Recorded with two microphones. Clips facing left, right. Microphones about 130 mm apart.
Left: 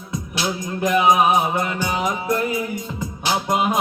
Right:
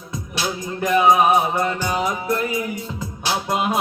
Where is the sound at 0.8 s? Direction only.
15° left (ahead or behind).